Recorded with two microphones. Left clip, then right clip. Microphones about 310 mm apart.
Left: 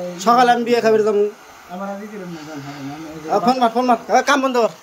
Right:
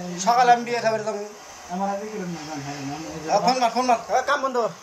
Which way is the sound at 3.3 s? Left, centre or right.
Left.